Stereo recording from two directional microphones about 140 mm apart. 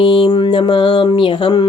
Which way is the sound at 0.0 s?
35° left (ahead or behind).